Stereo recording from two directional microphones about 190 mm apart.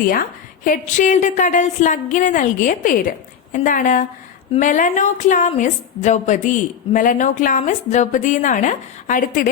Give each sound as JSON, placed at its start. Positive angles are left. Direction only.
{"t": 0.0, "sound": "a woman's voice", "side_deg": 50}